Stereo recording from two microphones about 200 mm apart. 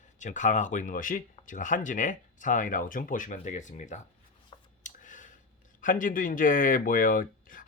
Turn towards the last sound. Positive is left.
turn(degrees=45)  # may be behind; listen again after turning